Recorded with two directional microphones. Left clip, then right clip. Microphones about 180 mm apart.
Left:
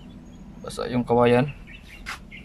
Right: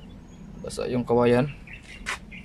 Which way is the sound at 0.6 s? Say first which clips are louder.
Left 1 dB; 5° right (ahead or behind).